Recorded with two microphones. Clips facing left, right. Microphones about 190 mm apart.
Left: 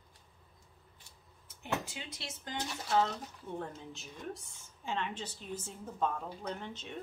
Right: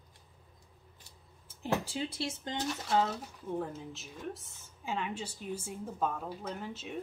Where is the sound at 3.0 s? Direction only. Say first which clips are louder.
Left 1 dB; 5° right (ahead or behind).